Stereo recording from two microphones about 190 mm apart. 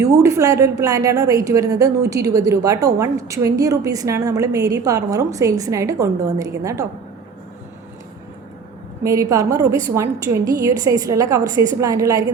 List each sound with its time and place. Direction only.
0.0 s a woman's voice: 15° right (ahead or behind)
9.0 s a woman's voice: 15° right (ahead or behind)